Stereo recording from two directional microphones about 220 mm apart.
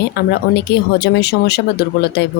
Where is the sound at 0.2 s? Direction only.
50° left (ahead or behind).